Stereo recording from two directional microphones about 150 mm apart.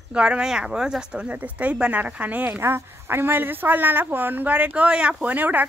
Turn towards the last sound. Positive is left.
turn(degrees=-10)  # may be behind; listen again after turning